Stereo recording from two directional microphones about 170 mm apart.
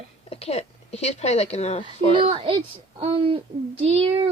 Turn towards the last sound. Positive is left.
turn(degrees=-35)  # may be behind; listen again after turning